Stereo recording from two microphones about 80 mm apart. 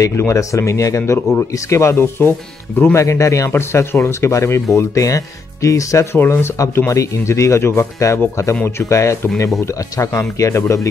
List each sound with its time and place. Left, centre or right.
0.0 s speech: left
3.0 s speech: left
6.1 s speech: left
6.9 s speech: left